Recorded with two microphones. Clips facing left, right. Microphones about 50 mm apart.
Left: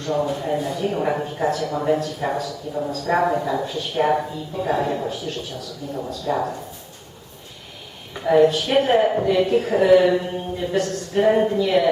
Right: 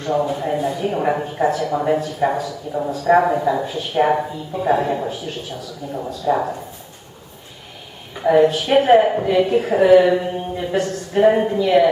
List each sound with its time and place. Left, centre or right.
0.0 s speech: centre
8.3 s speech: centre